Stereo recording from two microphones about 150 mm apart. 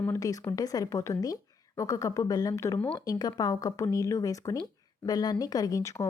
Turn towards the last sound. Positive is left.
turn(degrees=20)  # may be behind; listen again after turning